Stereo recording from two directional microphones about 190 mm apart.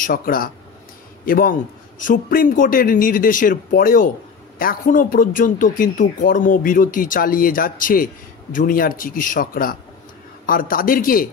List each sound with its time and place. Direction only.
0.0 s a man's voice: 50° left (ahead or behind)